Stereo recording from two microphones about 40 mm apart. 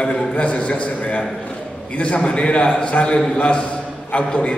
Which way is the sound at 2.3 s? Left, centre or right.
Left.